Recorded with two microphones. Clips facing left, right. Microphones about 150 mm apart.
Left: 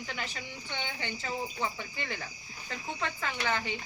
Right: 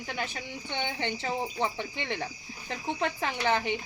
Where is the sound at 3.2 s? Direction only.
25° right (ahead or behind).